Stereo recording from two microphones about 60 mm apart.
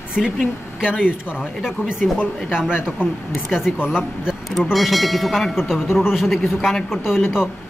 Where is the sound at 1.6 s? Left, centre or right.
Centre.